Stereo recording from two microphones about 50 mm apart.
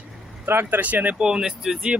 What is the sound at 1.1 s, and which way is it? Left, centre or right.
Speech, centre.